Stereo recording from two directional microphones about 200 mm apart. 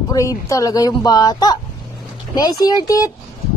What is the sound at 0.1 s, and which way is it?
Speech, 15° left (ahead or behind).